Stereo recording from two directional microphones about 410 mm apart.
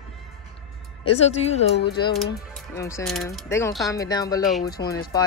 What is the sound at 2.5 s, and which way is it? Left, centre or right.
Speech, centre.